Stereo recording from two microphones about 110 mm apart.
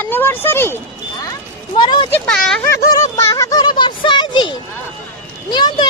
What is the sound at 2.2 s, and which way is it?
Speech, 5° left (ahead or behind).